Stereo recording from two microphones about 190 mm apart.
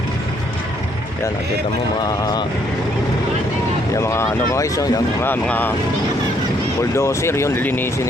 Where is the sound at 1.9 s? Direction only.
20° left (ahead or behind).